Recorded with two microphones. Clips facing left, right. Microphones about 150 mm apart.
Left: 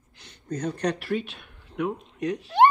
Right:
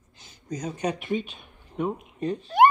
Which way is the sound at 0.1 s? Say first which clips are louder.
Left 2 dB; 65° left (ahead or behind).